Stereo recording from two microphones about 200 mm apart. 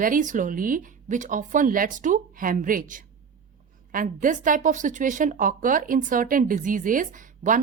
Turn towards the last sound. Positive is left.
turn(degrees=-40)  # may be behind; listen again after turning